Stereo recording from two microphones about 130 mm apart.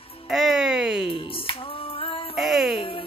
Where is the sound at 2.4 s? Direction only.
Centre (ahead or behind).